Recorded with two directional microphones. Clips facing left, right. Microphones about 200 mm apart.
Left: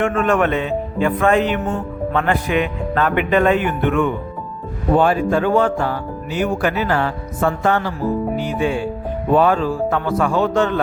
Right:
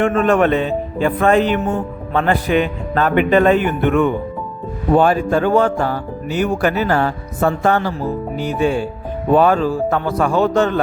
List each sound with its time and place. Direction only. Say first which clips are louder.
0.0 s speech: right 3 dB; 35° right (ahead or behind)